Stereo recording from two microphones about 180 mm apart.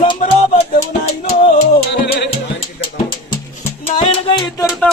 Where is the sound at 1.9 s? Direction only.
65° left (ahead or behind).